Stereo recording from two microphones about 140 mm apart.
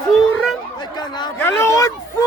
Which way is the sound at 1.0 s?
30° left (ahead or behind).